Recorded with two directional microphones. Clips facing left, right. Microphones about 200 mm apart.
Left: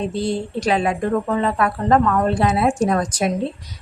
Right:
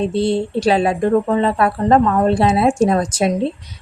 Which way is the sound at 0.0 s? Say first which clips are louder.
Right 5 dB; 30° right (ahead or behind).